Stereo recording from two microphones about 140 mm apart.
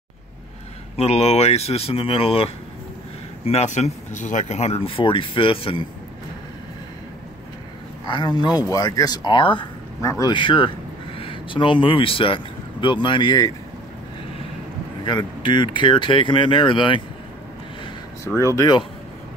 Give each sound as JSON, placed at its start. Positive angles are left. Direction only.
{"t": 0.9, "sound": "speech", "side_deg": 50}
{"t": 8.1, "sound": "speech", "side_deg": 30}
{"t": 10.0, "sound": "speech", "side_deg": 25}
{"t": 10.3, "sound": "speech", "side_deg": 35}
{"t": 15.0, "sound": "speech", "side_deg": 35}
{"t": 18.2, "sound": "speech", "side_deg": 20}
{"t": 18.6, "sound": "speech", "side_deg": 30}